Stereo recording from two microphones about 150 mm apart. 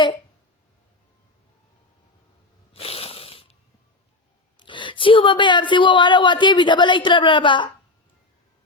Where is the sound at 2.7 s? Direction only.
40° left (ahead or behind).